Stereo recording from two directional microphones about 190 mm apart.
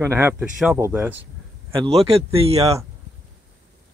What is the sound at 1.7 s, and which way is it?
A man's voice, 30° right (ahead or behind).